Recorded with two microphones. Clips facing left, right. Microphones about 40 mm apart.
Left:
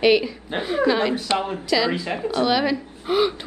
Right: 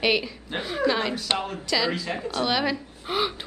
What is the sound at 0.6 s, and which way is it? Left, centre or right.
Speech, centre.